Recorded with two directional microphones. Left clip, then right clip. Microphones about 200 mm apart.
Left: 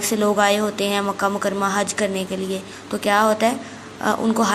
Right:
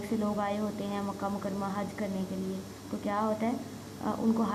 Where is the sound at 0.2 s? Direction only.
30° left (ahead or behind).